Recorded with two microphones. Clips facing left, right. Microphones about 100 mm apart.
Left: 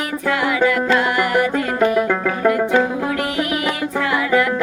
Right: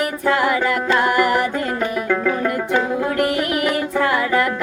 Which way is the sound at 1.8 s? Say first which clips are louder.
Left 4 dB; 15° left (ahead or behind).